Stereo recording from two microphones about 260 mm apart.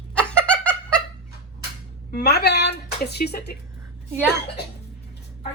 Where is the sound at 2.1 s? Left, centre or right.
Left.